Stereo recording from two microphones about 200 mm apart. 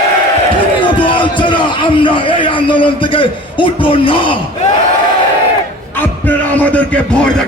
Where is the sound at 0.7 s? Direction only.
25° left (ahead or behind).